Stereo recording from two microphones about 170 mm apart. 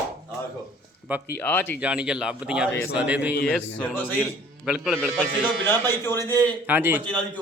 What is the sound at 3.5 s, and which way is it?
Speech, 5° left (ahead or behind).